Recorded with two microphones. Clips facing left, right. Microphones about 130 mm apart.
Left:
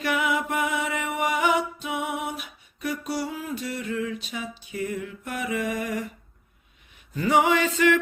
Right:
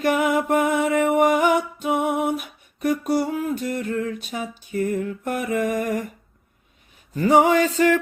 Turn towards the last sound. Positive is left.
turn(degrees=-40)  # may be behind; listen again after turning